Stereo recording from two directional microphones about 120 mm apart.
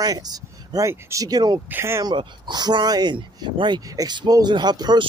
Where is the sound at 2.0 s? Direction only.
40° right (ahead or behind).